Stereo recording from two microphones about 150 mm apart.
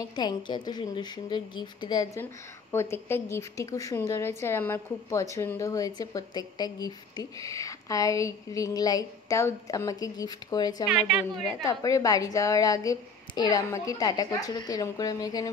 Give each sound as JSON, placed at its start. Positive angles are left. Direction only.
{"t": 0.0, "sound": "a woman's voice", "side_deg": 30}
{"t": 10.9, "sound": "a woman's voice", "side_deg": -5}
{"t": 11.4, "sound": "a woman's voice", "side_deg": 20}